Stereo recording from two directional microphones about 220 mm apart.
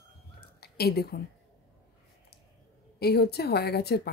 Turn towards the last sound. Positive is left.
turn(degrees=45)  # may be behind; listen again after turning